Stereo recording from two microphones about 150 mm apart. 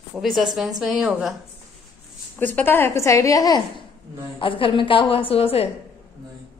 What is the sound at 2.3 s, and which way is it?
A woman's voice, 10° left (ahead or behind).